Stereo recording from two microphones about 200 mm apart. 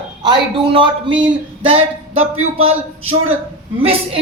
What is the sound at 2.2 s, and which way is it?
Speech, 90° right.